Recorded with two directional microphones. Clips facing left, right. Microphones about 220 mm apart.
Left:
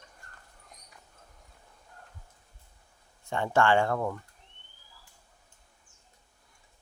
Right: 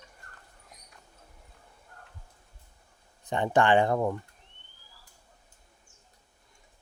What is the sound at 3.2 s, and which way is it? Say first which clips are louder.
Speech: right 1 dB; 20° right (ahead or behind).